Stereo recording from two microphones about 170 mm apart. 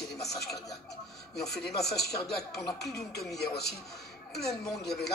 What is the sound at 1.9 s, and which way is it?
Speech, 70° left (ahead or behind).